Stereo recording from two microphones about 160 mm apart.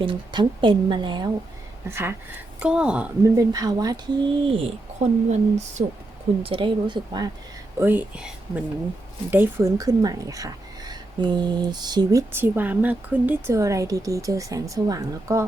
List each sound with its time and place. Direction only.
0.0 s a woman's voice: 30° right (ahead or behind)
1.9 s speech: 15° right (ahead or behind)
3.2 s a woman's voice: 20° right (ahead or behind)
4.4 s speech: 40° right (ahead or behind)
6.4 s a woman's voice: 30° right (ahead or behind)
7.8 s a woman's voice: 10° right (ahead or behind)
12.4 s a woman's voice: 10° right (ahead or behind)